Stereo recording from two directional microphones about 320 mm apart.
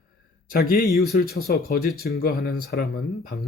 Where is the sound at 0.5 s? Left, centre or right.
Left.